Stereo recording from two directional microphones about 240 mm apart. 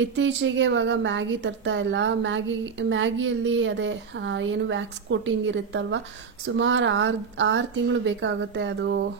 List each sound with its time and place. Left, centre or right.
0.0 s a woman's voice: right